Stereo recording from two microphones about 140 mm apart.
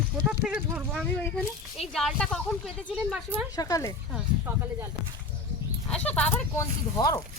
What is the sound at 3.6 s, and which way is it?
Speech, 25° left (ahead or behind).